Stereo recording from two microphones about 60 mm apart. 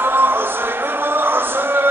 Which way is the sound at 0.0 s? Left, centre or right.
Right.